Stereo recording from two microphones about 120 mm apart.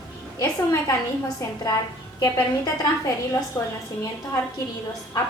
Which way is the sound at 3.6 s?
30° left (ahead or behind).